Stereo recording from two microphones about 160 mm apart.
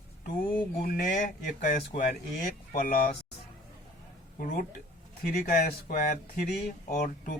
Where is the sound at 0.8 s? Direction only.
65° left (ahead or behind).